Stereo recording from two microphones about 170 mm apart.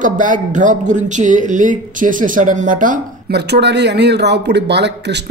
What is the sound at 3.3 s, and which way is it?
Speech, 75° right (ahead or behind).